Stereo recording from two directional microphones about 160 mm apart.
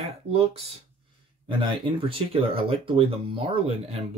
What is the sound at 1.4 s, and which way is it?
Speech, 30° right (ahead or behind).